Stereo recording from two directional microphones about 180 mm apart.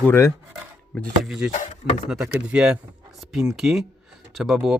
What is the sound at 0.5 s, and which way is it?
Speech, centre (ahead or behind).